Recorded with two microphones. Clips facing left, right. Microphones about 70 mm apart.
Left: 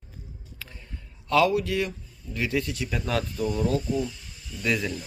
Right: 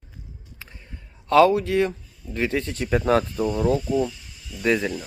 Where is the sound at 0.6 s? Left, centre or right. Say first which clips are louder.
Even; right.